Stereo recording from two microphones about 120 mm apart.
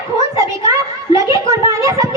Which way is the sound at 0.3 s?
30° right (ahead or behind).